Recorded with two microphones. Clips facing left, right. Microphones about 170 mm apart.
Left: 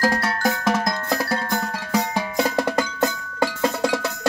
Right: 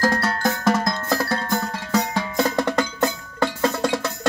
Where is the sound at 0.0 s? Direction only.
10° left (ahead or behind).